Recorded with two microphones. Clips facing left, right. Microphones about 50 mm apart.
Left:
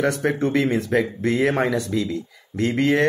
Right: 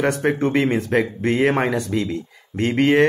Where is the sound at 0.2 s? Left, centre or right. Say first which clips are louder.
Right 2 dB; right.